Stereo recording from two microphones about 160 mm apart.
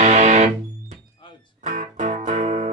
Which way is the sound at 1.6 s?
55° right (ahead or behind).